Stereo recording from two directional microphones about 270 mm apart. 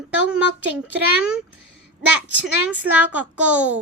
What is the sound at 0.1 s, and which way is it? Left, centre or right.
A child's voice, centre.